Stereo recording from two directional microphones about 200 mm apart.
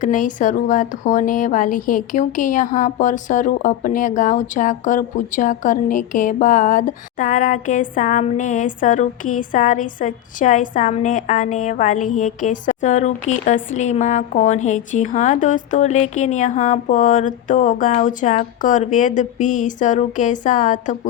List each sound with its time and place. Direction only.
0.0 s a woman's voice: 40° left (ahead or behind)